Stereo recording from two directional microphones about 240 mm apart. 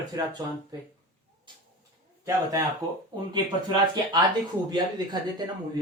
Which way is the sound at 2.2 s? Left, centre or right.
Centre.